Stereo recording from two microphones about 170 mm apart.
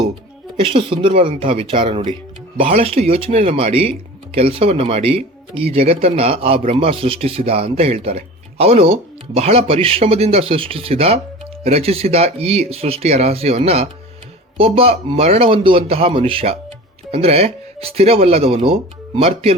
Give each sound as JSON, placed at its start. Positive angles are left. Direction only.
{"t": 0.6, "sound": "speech", "side_deg": -30}